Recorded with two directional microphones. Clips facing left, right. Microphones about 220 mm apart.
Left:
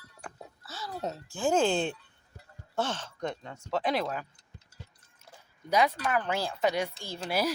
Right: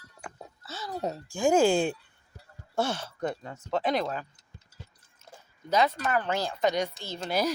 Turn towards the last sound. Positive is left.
turn(degrees=5)  # may be behind; listen again after turning